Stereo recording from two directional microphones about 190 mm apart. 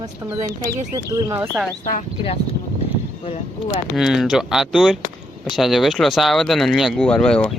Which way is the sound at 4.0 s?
Centre (ahead or behind).